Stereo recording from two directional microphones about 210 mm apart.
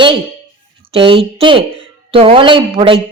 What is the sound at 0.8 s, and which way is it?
A woman's voice, 25° right (ahead or behind).